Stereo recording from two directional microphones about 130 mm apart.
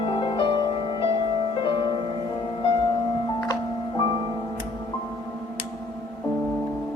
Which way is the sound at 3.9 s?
35° left (ahead or behind).